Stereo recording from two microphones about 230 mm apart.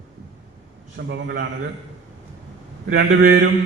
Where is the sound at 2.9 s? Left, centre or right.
Right.